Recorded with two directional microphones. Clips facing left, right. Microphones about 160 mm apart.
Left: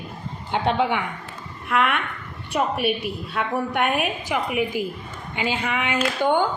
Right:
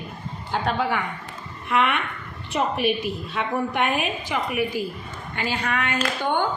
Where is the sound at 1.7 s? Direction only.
Centre (ahead or behind).